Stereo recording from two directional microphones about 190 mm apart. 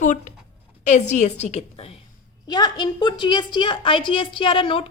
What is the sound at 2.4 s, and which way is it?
A woman's voice, 20° left (ahead or behind).